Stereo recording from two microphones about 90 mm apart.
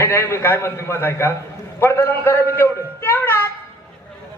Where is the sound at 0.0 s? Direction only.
30° left (ahead or behind).